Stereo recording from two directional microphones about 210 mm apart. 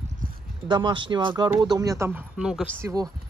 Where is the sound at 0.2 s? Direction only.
40° right (ahead or behind).